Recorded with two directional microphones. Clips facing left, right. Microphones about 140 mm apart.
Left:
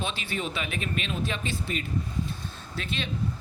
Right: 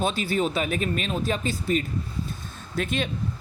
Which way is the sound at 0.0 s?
40° right (ahead or behind).